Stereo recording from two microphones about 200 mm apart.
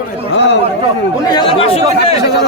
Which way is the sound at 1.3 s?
25° left (ahead or behind).